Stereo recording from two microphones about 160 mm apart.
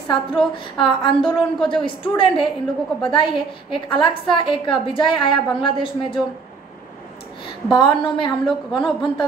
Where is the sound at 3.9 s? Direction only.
30° left (ahead or behind).